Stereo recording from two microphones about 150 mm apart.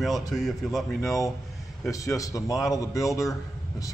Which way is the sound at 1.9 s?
20° left (ahead or behind).